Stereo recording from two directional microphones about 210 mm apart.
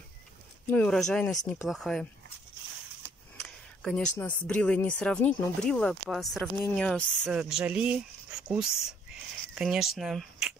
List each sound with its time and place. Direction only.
0.7 s speech: 5° left (ahead or behind)
3.4 s speech: 5° left (ahead or behind)